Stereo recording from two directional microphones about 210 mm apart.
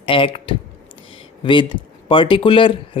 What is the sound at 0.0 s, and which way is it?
Speech, 25° left (ahead or behind).